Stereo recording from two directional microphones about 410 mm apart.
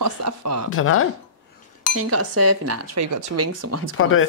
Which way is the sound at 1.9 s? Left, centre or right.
Right.